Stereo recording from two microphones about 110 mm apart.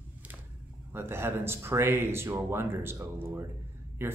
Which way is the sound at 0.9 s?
20° right (ahead or behind).